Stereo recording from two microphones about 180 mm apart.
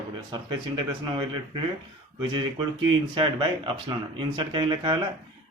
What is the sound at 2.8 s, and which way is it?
A man's voice, 25° right (ahead or behind).